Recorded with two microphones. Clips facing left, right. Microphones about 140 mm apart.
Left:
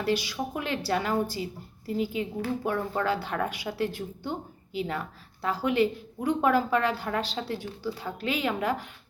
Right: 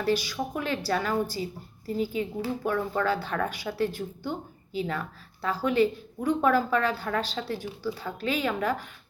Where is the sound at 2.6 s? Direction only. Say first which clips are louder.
Right 2 dB; 15° left (ahead or behind).